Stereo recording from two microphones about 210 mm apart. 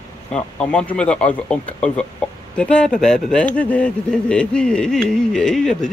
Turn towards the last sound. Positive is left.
turn(degrees=5)  # may be behind; listen again after turning